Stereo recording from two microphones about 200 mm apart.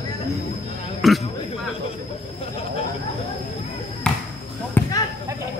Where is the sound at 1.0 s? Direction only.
Centre (ahead or behind).